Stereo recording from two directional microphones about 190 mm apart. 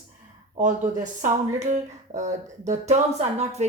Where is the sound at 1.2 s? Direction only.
40° right (ahead or behind).